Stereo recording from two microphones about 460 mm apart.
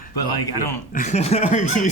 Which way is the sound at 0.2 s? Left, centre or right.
Left.